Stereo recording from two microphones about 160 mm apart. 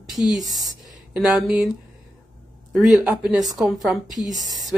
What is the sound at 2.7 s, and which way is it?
Speech, 5° right (ahead or behind).